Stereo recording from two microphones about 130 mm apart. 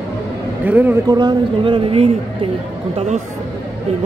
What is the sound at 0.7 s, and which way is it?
Speech, 15° right (ahead or behind).